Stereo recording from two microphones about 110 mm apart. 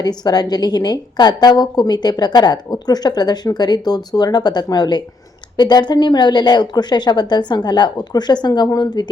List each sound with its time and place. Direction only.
0.0 s a woman's voice: 40° left (ahead or behind)